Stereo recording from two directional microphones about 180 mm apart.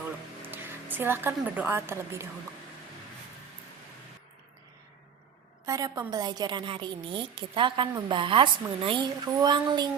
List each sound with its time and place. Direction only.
0.4 s a woman's voice: 10° right (ahead or behind)
5.6 s a woman's voice: 20° right (ahead or behind)